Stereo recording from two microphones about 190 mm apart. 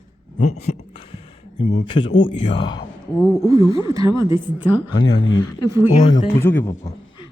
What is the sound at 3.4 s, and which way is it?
Speech, 20° right (ahead or behind).